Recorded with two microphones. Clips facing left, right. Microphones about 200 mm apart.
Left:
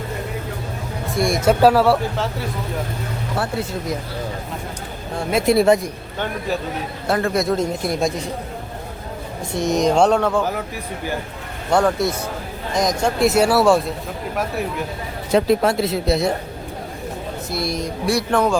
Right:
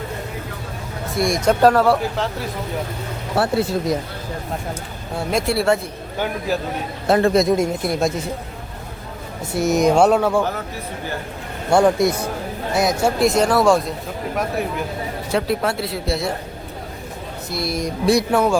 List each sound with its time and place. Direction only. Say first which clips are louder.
1.1 s speech: left 1 dB; centre (ahead or behind)
5.5 s a man's voice: left 6 dB; 20° left (ahead or behind)
6.1 s speech: right 2 dB; 5° right (ahead or behind)
7.1 s speech: right 4 dB; 20° right (ahead or behind)
7.5 s speech: right 2 dB; 5° right (ahead or behind)
9.6 s speech: right 1 dB; 5° right (ahead or behind)
11.7 s speech: right 3 dB; 10° right (ahead or behind)
15.3 s speech: left 5 dB; 20° left (ahead or behind)
17.5 s speech: even; centre (ahead or behind)
18.0 s speech: right 2 dB; 20° right (ahead or behind)